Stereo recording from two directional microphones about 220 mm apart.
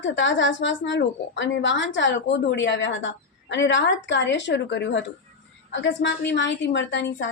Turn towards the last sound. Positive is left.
turn(degrees=55)  # may be behind; listen again after turning